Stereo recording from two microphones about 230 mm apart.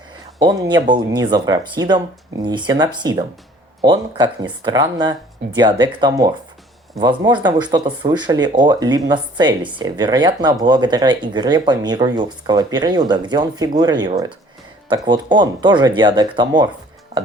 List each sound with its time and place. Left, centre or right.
0.4 s speech: centre